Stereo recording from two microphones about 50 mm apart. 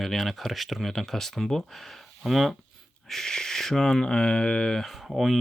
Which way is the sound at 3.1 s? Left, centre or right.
Centre.